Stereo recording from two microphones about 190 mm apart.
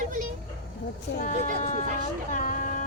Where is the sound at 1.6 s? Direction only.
40° left (ahead or behind).